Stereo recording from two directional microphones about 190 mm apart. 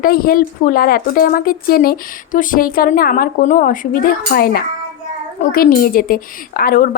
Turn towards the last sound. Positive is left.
turn(degrees=50)  # may be behind; listen again after turning